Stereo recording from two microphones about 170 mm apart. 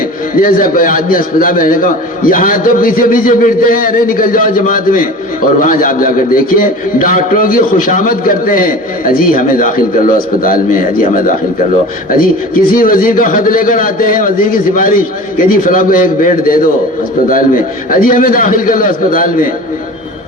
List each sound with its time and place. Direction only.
0.4 s a man's voice: 55° left (ahead or behind)